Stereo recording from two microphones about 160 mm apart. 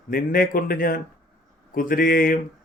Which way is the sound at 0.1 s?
60° left (ahead or behind).